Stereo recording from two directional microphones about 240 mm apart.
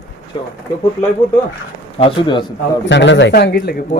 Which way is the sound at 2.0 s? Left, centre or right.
Left.